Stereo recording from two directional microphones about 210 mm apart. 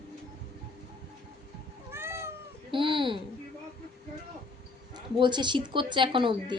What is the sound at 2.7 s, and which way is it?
Speech, 25° right (ahead or behind).